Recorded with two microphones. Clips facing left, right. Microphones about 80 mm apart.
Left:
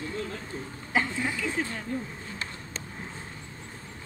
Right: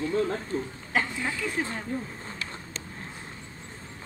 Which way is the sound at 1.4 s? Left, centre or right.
Centre.